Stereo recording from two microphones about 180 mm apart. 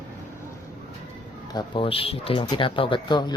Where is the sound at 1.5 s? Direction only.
25° left (ahead or behind).